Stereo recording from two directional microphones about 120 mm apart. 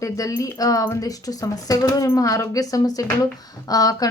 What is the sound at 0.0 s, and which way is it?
Speech, 25° left (ahead or behind).